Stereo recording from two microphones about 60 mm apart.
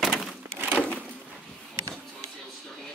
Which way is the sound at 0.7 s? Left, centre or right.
Left.